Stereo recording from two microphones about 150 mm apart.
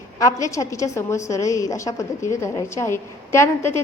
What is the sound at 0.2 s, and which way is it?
A woman's voice, 20° left (ahead or behind).